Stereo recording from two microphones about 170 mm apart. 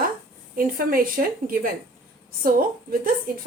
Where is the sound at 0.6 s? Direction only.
55° right (ahead or behind).